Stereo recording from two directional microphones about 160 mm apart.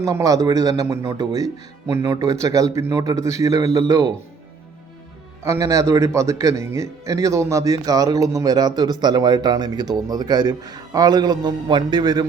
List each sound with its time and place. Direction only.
0.0 s a man's voice: 20° right (ahead or behind)
5.4 s a man's voice: 20° right (ahead or behind)